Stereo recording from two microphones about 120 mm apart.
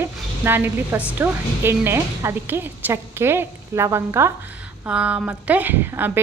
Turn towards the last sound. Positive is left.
turn(degrees=-15)  # may be behind; listen again after turning